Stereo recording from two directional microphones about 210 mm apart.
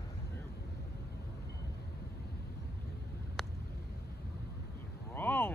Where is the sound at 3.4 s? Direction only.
Centre (ahead or behind).